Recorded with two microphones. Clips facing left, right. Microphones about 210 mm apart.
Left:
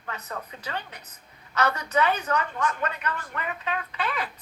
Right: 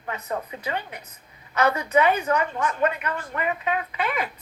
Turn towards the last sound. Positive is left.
turn(degrees=-25)  # may be behind; listen again after turning